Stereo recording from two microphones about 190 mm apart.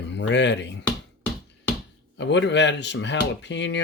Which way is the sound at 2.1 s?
70° left (ahead or behind).